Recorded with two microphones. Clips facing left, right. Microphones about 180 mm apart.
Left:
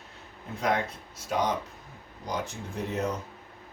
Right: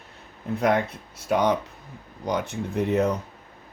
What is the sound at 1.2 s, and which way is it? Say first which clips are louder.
Speech: right 6 dB; 65° right (ahead or behind).